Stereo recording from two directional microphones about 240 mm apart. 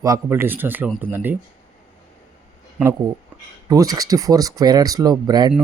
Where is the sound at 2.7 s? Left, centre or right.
Centre.